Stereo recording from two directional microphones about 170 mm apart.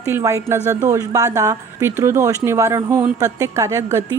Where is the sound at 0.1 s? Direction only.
15° right (ahead or behind).